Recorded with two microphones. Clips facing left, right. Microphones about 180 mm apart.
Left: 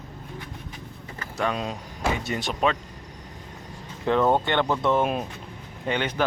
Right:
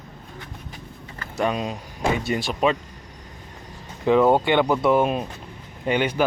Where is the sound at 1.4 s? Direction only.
10° right (ahead or behind).